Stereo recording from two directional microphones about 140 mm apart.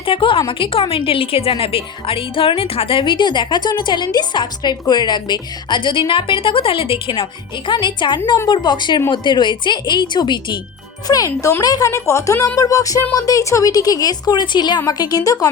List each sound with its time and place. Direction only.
0.0 s a woman's voice: 40° left (ahead or behind)